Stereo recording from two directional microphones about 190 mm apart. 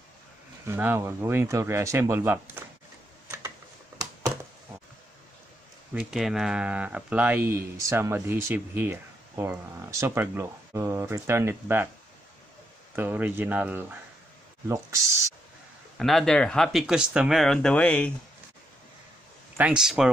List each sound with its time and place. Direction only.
0.7 s speech: 10° right (ahead or behind)
5.9 s speech: centre (ahead or behind)
12.9 s speech: 10° right (ahead or behind)
16.0 s speech: centre (ahead or behind)
19.5 s speech: 5° right (ahead or behind)